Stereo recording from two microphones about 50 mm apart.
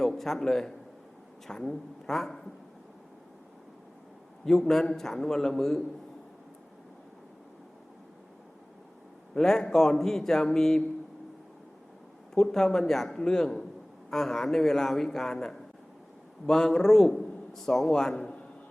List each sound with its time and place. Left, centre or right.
0.0 s a man's voice: centre
4.7 s speech: centre
9.3 s speech: centre
12.3 s a man's voice: centre
18.1 s a sound: centre